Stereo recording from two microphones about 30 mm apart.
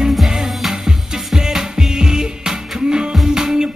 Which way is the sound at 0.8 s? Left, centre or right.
Centre.